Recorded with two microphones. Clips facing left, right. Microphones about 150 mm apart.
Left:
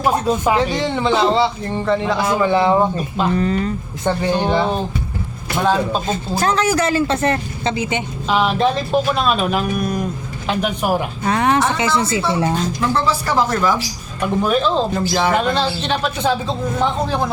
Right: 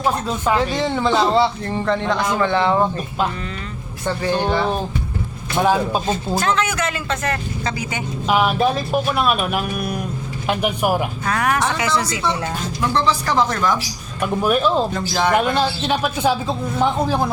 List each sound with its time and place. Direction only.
0.0 s speech: 15° left (ahead or behind)
0.5 s a man's voice: centre (ahead or behind)
3.3 s speech: 40° left (ahead or behind)
4.0 s speech: 20° left (ahead or behind)
5.5 s a man's voice: 10° right (ahead or behind)
6.4 s speech: 35° left (ahead or behind)
8.3 s a man's voice: 10° right (ahead or behind)
11.3 s speech: 25° left (ahead or behind)
12.9 s a man's voice: 5° left (ahead or behind)
14.2 s a man's voice: 10° right (ahead or behind)
14.9 s a man's voice: 5° left (ahead or behind)
15.3 s a man's voice: 10° right (ahead or behind)